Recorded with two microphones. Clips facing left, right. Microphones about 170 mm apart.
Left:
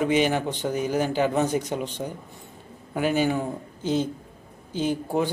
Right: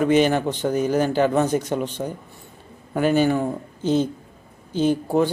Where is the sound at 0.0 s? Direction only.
10° left (ahead or behind).